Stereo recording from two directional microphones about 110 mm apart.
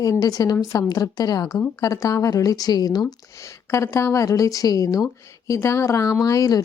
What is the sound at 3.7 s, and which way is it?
A woman's voice, 25° left (ahead or behind).